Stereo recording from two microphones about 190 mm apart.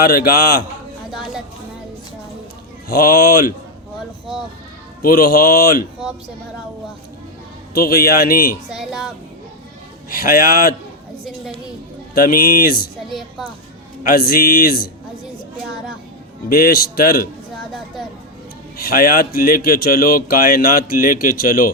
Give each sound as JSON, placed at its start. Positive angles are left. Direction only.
{"t": 0.0, "sound": "a man's voice", "side_deg": 55}
{"t": 2.9, "sound": "speech", "side_deg": 55}
{"t": 5.0, "sound": "speech", "side_deg": 50}
{"t": 7.7, "sound": "speech", "side_deg": 55}
{"t": 8.7, "sound": "a woman's voice", "side_deg": 0}
{"t": 10.2, "sound": "speech", "side_deg": 50}
{"t": 12.1, "sound": "speech", "side_deg": 50}
{"t": 14.0, "sound": "speech", "side_deg": 50}
{"t": 16.5, "sound": "speech", "side_deg": 50}
{"t": 18.8, "sound": "speech", "side_deg": 55}